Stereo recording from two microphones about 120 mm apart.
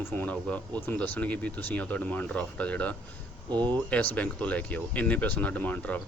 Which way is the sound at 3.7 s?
10° left (ahead or behind).